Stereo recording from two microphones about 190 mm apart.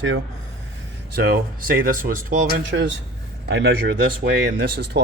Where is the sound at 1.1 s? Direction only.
50° right (ahead or behind).